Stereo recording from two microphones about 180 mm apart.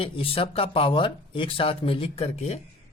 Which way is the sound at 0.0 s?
30° left (ahead or behind).